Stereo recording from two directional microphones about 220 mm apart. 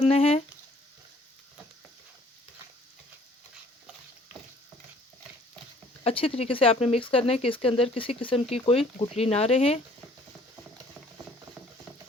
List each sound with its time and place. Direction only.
0.0 s speech: 25° left (ahead or behind)
6.0 s speech: 25° left (ahead or behind)